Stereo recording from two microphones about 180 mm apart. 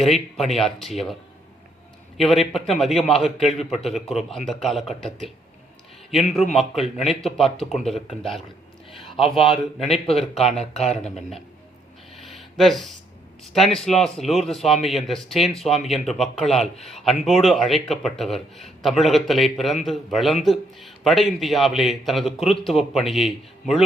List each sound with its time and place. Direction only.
0.0 s speech: centre (ahead or behind)
2.1 s speech: centre (ahead or behind)
6.5 s a man's voice: centre (ahead or behind)
9.9 s speech: 35° left (ahead or behind)
11.0 s speech: centre (ahead or behind)
12.1 s a sound: centre (ahead or behind)
13.4 s speech: centre (ahead or behind)